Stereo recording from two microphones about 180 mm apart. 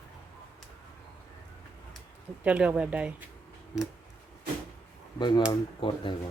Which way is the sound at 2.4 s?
5° right (ahead or behind).